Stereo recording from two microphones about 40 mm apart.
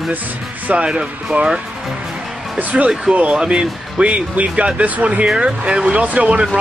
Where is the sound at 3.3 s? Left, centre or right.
Centre; by 5.3 s right.